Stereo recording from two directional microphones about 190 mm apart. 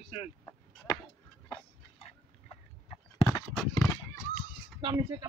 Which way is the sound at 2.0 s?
30° left (ahead or behind).